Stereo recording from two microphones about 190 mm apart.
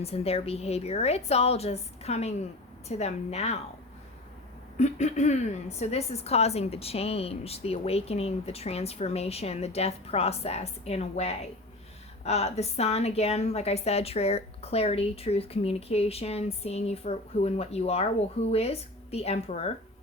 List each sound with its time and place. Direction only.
0.0 s a woman's voice: 30° left (ahead or behind)
4.8 s a woman's voice: 35° left (ahead or behind)